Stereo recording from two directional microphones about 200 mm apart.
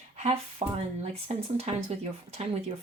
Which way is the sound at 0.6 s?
25° right (ahead or behind).